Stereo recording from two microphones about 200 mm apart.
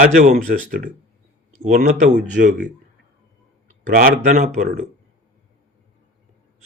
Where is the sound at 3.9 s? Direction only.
45° right (ahead or behind).